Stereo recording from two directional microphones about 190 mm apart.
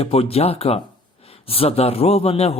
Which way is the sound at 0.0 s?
30° left (ahead or behind).